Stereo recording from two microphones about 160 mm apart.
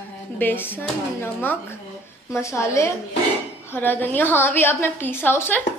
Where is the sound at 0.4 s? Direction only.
10° left (ahead or behind).